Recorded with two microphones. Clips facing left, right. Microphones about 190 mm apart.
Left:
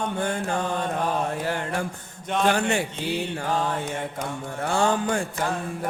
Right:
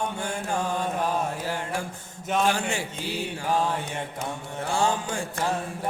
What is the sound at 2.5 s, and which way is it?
Music, 60° left (ahead or behind).